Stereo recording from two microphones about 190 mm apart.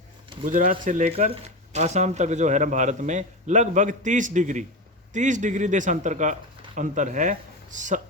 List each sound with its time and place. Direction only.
0.4 s speech: 45° right (ahead or behind)